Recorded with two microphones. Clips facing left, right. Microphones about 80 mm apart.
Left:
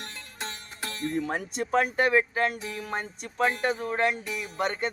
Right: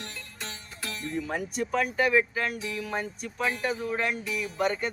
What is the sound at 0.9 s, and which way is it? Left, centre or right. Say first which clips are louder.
Speech: left 3 dB; left.